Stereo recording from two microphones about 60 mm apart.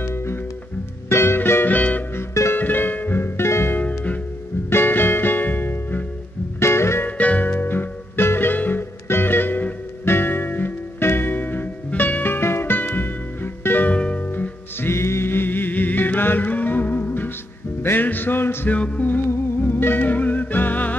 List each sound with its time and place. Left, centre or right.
0.0 s music: left
6.6 s music: left
7.1 s music: left
13.9 s music: centre
14.2 s music: left
18.8 s music: left